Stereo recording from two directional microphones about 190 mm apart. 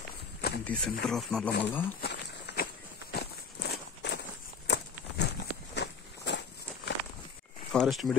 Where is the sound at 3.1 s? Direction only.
60° left (ahead or behind).